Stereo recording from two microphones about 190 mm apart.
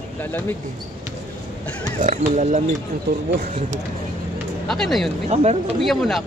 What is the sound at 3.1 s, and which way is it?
Speech, 55° right (ahead or behind).